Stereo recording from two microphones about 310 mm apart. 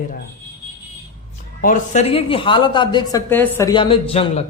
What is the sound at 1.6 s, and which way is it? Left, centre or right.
Speech, left.